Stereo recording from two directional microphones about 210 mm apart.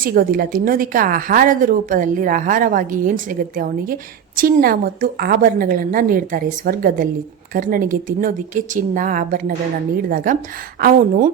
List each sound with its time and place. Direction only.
0.0 s a woman's voice: 45° right (ahead or behind)